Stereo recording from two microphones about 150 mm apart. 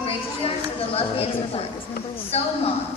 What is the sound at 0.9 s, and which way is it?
A woman's voice, 40° left (ahead or behind).